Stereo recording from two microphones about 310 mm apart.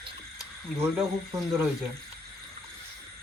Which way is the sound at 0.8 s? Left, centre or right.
Centre.